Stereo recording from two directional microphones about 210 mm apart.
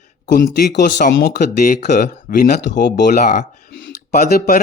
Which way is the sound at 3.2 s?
35° left (ahead or behind).